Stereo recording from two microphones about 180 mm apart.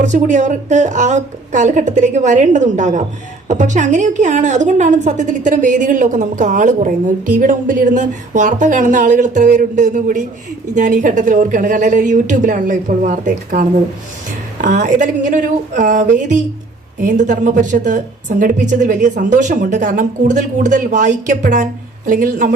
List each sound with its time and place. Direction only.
0.0 s a woman's voice: 45° right (ahead or behind)